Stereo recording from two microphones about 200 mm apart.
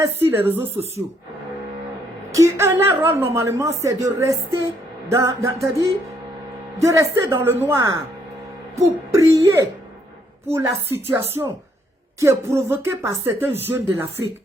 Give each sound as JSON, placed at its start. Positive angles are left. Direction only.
{"t": 0.3, "sound": "speech", "side_deg": -10}
{"t": 2.3, "sound": "speech", "side_deg": -15}